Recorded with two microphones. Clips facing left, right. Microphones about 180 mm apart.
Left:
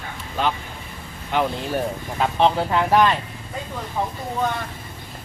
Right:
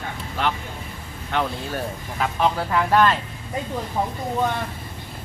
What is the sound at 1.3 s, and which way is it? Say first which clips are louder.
Speech: left 3 dB; 15° left (ahead or behind).